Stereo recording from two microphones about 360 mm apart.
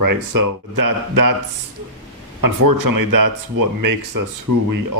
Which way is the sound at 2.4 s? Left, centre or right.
Right.